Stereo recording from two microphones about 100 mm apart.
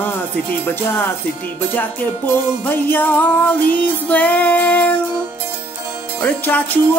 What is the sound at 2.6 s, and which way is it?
Music, 20° left (ahead or behind).